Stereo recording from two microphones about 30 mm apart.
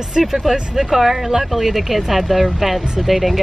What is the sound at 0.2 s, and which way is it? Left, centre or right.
Speech, centre.